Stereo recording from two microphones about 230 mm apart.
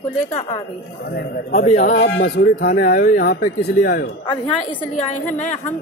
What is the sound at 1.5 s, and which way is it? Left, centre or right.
A man's voice, left.